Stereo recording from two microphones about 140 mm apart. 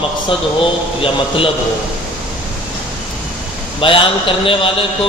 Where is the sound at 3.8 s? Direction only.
40° left (ahead or behind).